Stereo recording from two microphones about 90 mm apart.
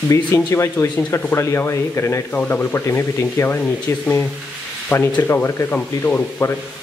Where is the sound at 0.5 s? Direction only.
30° left (ahead or behind).